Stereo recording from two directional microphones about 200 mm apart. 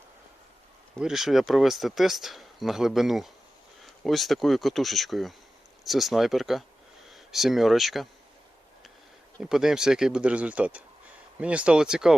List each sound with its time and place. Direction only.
0.9 s speech: centre (ahead or behind)
9.4 s speech: centre (ahead or behind)